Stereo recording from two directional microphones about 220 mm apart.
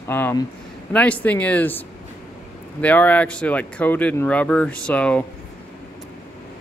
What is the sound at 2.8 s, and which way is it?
Speech, 5° left (ahead or behind).